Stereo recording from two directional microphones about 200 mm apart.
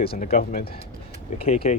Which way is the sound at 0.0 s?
50° left (ahead or behind).